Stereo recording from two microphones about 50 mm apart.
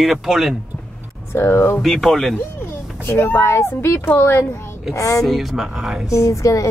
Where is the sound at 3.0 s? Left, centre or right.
Left.